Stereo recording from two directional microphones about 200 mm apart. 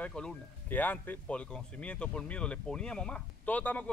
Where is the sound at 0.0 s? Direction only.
5° left (ahead or behind).